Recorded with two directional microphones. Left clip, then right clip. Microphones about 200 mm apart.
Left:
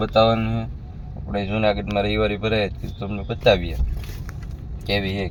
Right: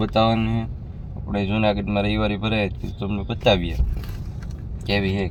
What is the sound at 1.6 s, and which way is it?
Speech, 5° left (ahead or behind).